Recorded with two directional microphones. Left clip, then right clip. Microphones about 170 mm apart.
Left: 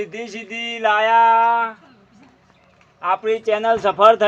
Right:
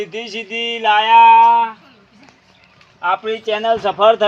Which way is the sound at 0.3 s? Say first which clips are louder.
Right 7 dB; 5° right (ahead or behind).